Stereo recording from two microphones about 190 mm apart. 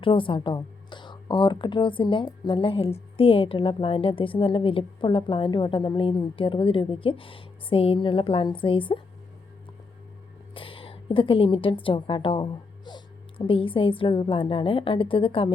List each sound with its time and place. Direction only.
0.0 s speech: 25° left (ahead or behind)
10.5 s a woman's voice: 30° left (ahead or behind)